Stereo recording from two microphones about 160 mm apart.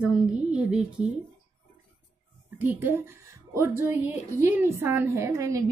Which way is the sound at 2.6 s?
10° right (ahead or behind).